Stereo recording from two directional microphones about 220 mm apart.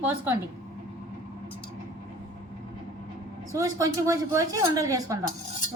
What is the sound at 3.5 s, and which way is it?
Speech, 15° right (ahead or behind).